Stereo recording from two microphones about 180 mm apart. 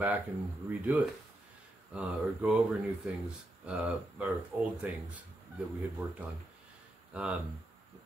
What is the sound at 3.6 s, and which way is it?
Speech, 5° right (ahead or behind).